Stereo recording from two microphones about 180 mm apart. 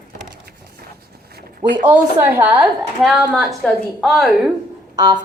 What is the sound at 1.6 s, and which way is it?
Speech, 25° right (ahead or behind).